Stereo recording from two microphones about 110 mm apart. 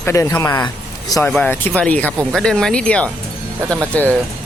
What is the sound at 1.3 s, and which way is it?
Speech, 15° left (ahead or behind).